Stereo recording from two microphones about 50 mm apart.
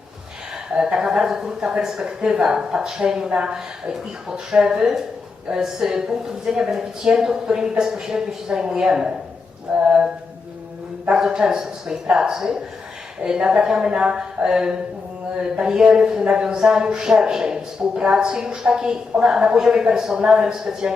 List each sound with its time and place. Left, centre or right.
0.8 s speech: centre
11.1 s speech: centre